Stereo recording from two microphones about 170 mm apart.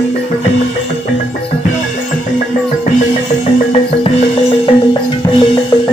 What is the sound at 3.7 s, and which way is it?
Music, 35° left (ahead or behind).